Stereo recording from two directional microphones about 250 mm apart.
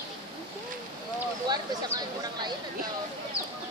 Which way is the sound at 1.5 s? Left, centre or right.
Centre.